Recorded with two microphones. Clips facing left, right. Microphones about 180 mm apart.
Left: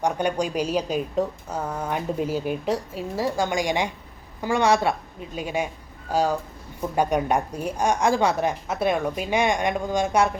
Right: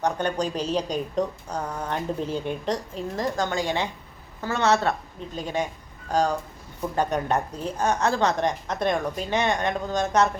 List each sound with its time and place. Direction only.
0.0 s a woman's voice: 10° left (ahead or behind)